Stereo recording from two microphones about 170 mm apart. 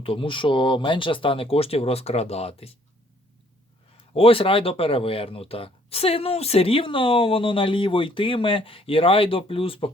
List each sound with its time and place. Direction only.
0.0 s speech: 30° left (ahead or behind)
3.9 s speech: 35° left (ahead or behind)